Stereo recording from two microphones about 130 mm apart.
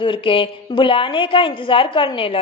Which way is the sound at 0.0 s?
40° left (ahead or behind).